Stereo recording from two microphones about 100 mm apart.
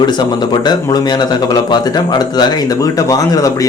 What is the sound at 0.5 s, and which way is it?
Speech, 45° left (ahead or behind).